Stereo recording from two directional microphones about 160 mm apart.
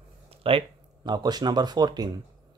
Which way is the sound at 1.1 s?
25° right (ahead or behind).